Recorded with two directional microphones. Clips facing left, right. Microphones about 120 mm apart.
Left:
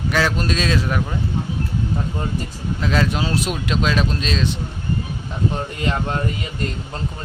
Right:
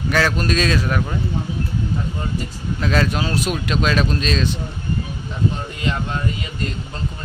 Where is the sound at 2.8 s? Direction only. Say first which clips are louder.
Right 1 dB; 15° left (ahead or behind).